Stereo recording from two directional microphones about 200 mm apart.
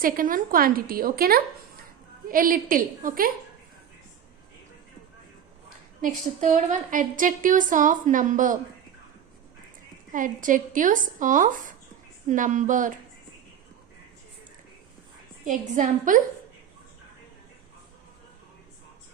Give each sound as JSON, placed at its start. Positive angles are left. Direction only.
{"t": 0.0, "sound": "a woman's voice", "side_deg": -45}
{"t": 6.0, "sound": "a woman's voice", "side_deg": -40}
{"t": 10.1, "sound": "a woman's voice", "side_deg": -40}
{"t": 15.4, "sound": "a woman's voice", "side_deg": -40}